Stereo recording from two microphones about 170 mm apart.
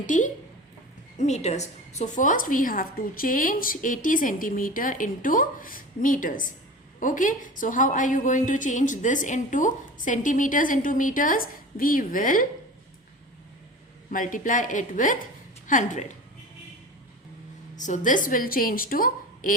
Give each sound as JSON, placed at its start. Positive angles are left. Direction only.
{"t": 0.0, "sound": "a woman's voice", "side_deg": 50}
{"t": 14.1, "sound": "a woman's voice", "side_deg": 50}
{"t": 17.7, "sound": "a woman's voice", "side_deg": 45}